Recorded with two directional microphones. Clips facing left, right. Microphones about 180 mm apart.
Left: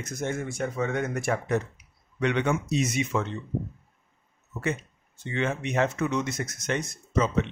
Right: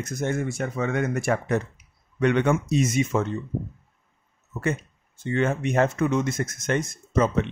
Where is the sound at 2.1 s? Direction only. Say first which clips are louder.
Right 4 dB; 50° right (ahead or behind).